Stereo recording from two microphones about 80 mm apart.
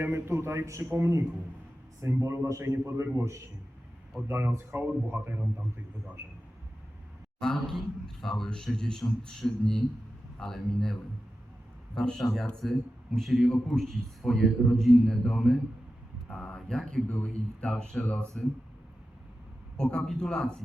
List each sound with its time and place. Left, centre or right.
0.0 s a man's voice: right
2.2 s a man's voice: right
7.3 s a man's voice: centre
11.9 s a man's voice: centre
19.7 s a man's voice: centre